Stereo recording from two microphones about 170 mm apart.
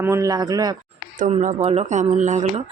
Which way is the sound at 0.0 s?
15° right (ahead or behind).